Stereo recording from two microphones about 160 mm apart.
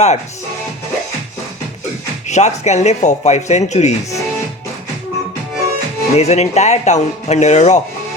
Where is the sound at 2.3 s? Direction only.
45° left (ahead or behind).